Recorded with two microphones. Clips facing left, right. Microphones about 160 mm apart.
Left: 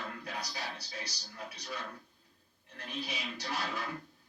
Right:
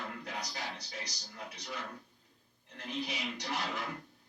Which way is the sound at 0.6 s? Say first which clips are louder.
Even; 20° right (ahead or behind).